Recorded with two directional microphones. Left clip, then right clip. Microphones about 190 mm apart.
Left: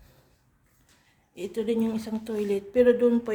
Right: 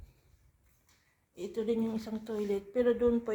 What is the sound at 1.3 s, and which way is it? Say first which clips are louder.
A woman's voice: left 5 dB; 15° left (ahead or behind).